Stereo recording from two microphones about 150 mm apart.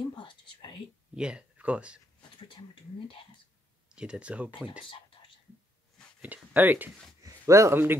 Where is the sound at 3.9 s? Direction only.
5° right (ahead or behind).